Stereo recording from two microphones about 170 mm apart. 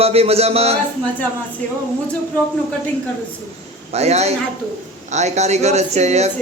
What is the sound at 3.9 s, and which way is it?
Speech, 40° right (ahead or behind).